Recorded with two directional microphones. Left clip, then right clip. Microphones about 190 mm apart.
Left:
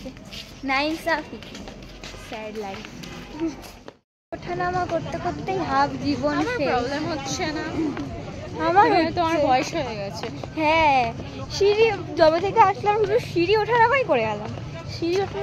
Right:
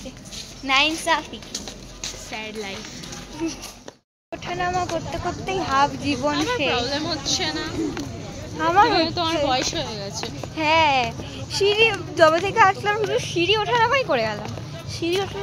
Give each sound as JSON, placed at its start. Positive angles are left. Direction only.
{"t": 0.7, "sound": "a child's voice", "side_deg": 15}
{"t": 4.6, "sound": "a child's voice", "side_deg": 15}
{"t": 7.2, "sound": "a woman's voice", "side_deg": 25}
{"t": 8.9, "sound": "a woman's voice", "side_deg": 35}